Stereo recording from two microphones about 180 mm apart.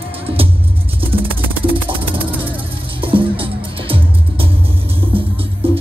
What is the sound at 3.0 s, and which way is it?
Music, 30° right (ahead or behind).